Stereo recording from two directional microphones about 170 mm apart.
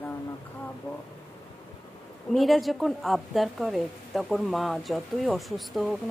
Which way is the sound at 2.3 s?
Centre (ahead or behind).